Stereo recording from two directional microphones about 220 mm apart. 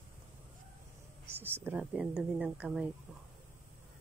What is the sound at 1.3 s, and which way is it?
Speech, 10° right (ahead or behind).